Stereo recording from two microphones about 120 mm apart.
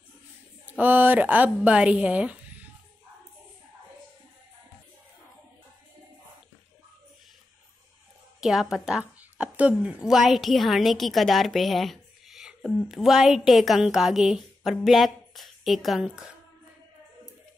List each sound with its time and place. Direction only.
0.7 s speech: 15° right (ahead or behind)
8.4 s a woman's voice: 5° right (ahead or behind)